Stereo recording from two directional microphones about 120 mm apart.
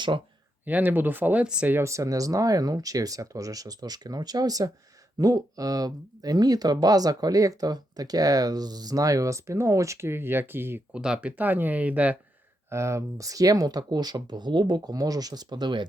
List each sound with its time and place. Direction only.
0.6 s speech: 15° right (ahead or behind)
12.7 s speech: 25° right (ahead or behind); by 15.9 s 40° right (ahead or behind)